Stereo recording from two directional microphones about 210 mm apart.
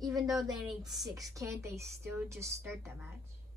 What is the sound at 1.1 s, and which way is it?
A woman's voice, 15° right (ahead or behind).